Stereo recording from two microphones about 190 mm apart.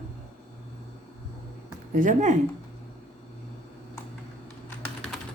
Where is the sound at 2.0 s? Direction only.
40° right (ahead or behind).